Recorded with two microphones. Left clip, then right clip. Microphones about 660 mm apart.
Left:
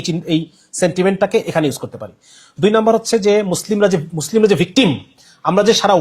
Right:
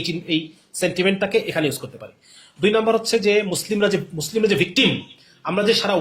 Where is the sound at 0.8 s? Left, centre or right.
Left.